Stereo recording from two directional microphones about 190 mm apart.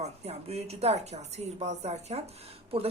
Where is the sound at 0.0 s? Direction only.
35° right (ahead or behind).